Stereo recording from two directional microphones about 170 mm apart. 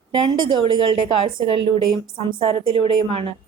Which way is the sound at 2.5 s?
30° right (ahead or behind).